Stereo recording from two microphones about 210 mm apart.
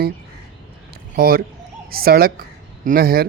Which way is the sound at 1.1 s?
45° right (ahead or behind).